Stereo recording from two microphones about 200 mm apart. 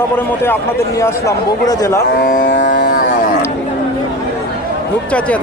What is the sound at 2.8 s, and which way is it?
Cattle, 50° left (ahead or behind).